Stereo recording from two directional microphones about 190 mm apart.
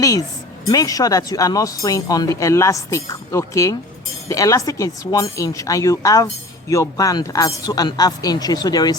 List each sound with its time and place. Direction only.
0.7 s speech: 20° left (ahead or behind)